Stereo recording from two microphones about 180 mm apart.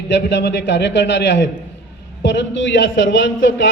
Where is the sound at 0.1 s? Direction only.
70° left (ahead or behind).